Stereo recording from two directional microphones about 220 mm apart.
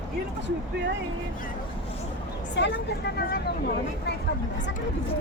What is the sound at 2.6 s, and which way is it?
Speech, 50° left (ahead or behind).